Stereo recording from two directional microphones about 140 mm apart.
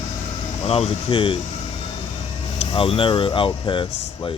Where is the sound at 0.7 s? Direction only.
45° left (ahead or behind).